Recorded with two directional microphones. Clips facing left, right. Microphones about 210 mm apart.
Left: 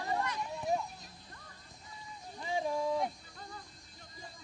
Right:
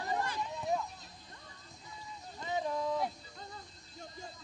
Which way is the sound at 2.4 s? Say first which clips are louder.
Left 1 dB; 10° left (ahead or behind).